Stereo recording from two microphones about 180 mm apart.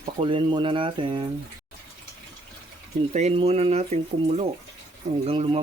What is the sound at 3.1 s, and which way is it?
Speech, 35° right (ahead or behind).